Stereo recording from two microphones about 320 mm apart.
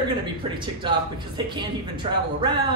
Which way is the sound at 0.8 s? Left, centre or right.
Centre.